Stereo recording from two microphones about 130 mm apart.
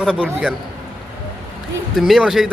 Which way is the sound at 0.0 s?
5° right (ahead or behind).